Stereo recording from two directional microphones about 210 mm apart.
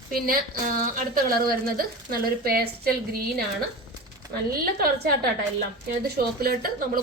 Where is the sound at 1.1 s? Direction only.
45° right (ahead or behind).